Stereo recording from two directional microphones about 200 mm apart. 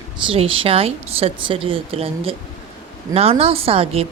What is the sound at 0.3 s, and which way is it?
A woman's voice, 25° right (ahead or behind).